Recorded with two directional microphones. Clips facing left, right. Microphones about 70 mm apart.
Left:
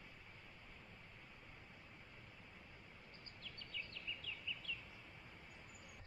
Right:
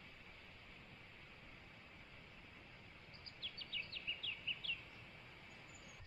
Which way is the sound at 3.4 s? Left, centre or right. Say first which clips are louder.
Right 1 dB; centre.